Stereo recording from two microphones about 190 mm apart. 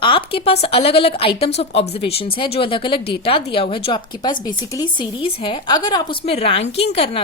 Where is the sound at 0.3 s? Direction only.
30° left (ahead or behind).